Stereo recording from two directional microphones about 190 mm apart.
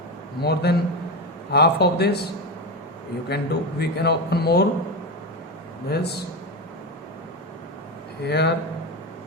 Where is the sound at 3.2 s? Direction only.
60° left (ahead or behind).